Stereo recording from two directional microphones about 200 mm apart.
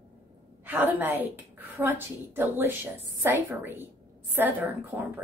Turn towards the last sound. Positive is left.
turn(degrees=-10)  # may be behind; listen again after turning